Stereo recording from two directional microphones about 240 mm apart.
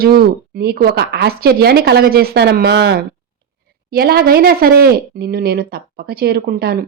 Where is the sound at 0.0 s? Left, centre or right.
Right.